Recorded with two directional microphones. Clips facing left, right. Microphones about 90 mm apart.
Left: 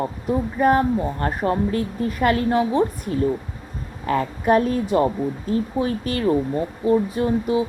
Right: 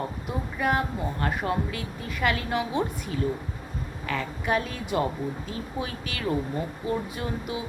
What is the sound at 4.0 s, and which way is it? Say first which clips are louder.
A woman's voice: left 10 dB; 40° left (ahead or behind).